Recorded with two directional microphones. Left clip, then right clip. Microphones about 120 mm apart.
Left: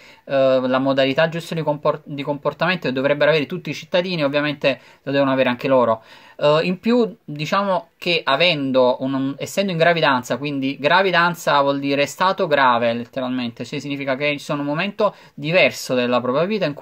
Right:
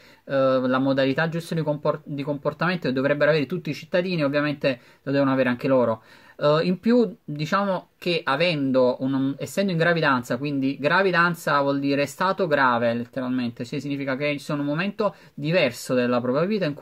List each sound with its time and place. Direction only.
0.3 s speech: 30° right (ahead or behind)